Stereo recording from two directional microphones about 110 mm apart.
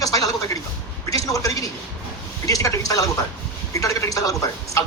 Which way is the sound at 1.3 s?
30° left (ahead or behind).